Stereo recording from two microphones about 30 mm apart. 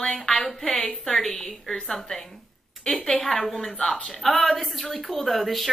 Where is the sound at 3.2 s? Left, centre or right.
Centre.